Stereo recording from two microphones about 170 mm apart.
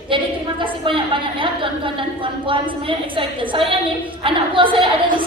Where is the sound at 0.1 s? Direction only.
30° right (ahead or behind).